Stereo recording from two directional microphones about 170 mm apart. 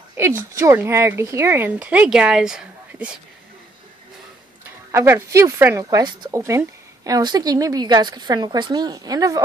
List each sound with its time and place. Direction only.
0.4 s speech: 15° right (ahead or behind)
4.9 s a woman's voice: 15° right (ahead or behind)